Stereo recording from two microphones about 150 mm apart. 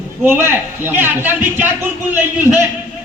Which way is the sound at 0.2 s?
15° right (ahead or behind).